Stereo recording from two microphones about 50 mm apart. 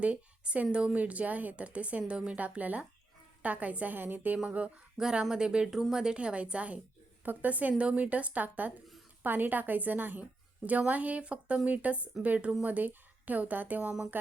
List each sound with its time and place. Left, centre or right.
0.0 s a woman's voice: right
4.4 s a woman's voice: right
4.9 s a woman's voice: centre; by 13.9 s right